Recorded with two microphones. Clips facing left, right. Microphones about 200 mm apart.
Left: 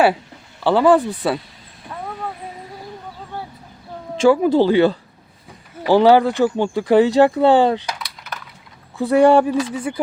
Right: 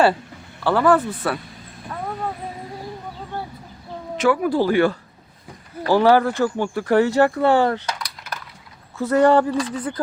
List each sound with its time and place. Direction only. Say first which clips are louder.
0.6 s speech: left 3 dB; 15° left (ahead or behind)
4.2 s speech: left 5 dB; 25° left (ahead or behind)
7.9 s a sound: even; centre (ahead or behind)
9.0 s speech: left 3 dB; 15° left (ahead or behind)